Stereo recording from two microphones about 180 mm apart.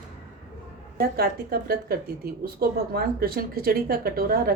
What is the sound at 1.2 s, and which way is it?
Speech, 55° right (ahead or behind).